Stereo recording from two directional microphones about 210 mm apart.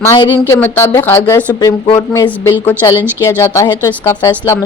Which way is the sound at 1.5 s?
20° left (ahead or behind).